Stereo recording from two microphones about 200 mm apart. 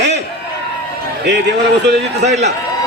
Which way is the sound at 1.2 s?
60° right (ahead or behind).